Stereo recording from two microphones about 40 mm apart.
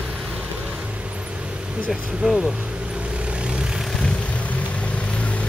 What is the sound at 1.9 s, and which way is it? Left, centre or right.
Speech, centre.